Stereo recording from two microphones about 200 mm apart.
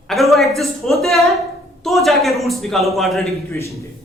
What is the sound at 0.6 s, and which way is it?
A man's voice, centre (ahead or behind).